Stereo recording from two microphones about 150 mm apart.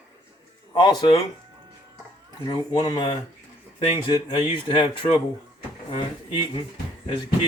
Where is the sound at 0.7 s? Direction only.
30° left (ahead or behind).